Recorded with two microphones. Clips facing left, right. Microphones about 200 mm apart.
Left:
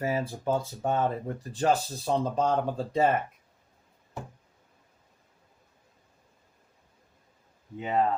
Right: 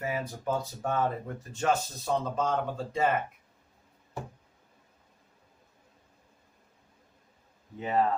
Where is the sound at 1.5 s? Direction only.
35° left (ahead or behind).